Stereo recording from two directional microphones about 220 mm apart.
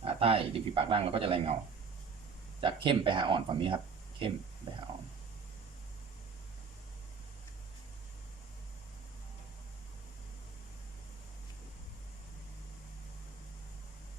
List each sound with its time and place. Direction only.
0.0 s speech: 25° right (ahead or behind)
2.6 s speech: 25° right (ahead or behind)